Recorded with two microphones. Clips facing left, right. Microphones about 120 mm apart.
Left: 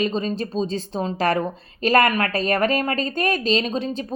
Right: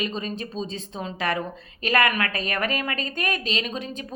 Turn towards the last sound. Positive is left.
turn(degrees=30)  # may be behind; listen again after turning